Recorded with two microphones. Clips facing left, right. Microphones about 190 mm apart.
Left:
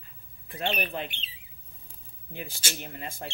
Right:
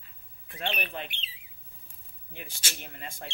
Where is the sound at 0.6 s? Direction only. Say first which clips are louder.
Left 4 dB; 40° left (ahead or behind).